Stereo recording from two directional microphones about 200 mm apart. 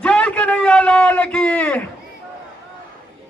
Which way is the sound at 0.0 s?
5° left (ahead or behind).